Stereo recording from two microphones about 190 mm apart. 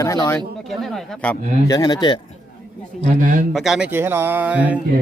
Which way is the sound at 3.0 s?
45° right (ahead or behind).